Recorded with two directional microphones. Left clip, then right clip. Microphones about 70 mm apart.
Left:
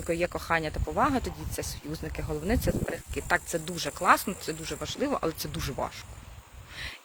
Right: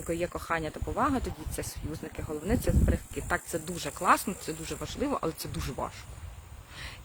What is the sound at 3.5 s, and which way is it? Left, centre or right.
Speech, centre.